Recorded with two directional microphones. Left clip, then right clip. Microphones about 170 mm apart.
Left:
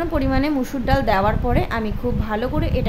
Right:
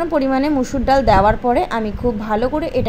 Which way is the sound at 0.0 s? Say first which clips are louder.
Right 4 dB; 15° right (ahead or behind).